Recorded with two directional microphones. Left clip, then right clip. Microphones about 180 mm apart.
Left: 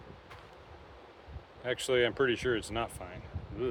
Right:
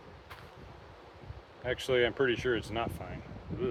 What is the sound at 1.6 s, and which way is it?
Speech, 20° left (ahead or behind).